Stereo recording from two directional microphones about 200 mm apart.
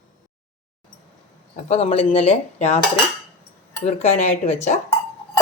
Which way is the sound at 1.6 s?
30° left (ahead or behind).